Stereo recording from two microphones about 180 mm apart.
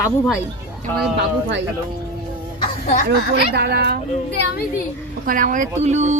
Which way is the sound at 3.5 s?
65° right (ahead or behind).